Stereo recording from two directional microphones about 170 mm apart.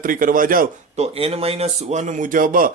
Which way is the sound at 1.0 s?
35° right (ahead or behind).